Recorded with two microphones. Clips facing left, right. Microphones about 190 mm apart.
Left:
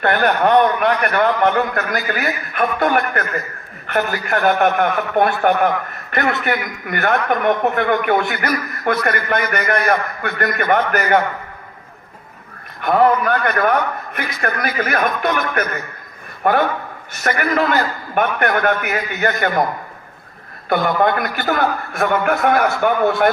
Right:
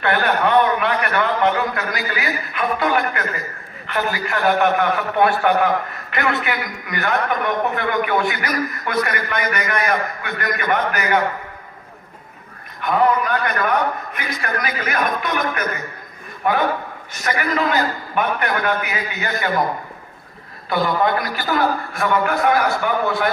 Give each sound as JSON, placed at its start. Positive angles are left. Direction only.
{"t": 0.0, "sound": "a man's voice", "side_deg": 45}
{"t": 12.8, "sound": "a man's voice", "side_deg": 50}
{"t": 20.7, "sound": "a man's voice", "side_deg": 55}